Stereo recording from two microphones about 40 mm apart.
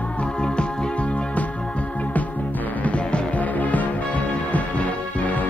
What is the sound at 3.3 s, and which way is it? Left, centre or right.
Music, left.